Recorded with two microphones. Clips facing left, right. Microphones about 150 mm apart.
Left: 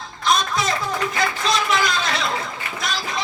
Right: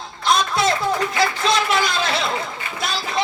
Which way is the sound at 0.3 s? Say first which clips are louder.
Right 2 dB; 30° right (ahead or behind).